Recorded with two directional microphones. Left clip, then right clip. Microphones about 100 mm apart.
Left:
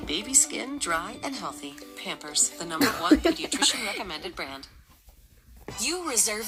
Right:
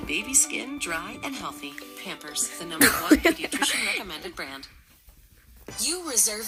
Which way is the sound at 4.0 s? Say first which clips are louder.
Left 1 dB; 20° right (ahead or behind).